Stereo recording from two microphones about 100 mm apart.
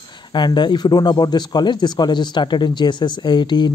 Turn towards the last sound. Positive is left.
turn(degrees=50)  # may be behind; listen again after turning